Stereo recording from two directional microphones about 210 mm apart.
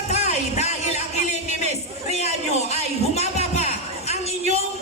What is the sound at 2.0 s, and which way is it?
Music, 30° left (ahead or behind).